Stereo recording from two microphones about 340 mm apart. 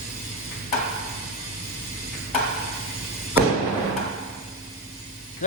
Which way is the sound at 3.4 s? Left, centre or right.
Centre.